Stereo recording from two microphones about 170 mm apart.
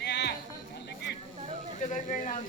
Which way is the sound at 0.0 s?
80° left.